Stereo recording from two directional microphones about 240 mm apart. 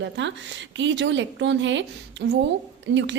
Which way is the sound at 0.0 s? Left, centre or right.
Right.